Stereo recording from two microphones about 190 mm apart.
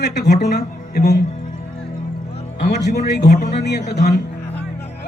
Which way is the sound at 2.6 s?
55° left (ahead or behind).